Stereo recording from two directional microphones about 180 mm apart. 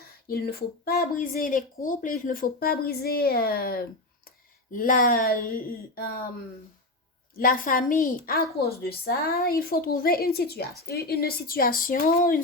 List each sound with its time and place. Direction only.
0.0 s a sound: 60° left (ahead or behind)
1.2 s a woman's voice: 50° left (ahead or behind)
7.3 s a woman's voice: 50° left (ahead or behind)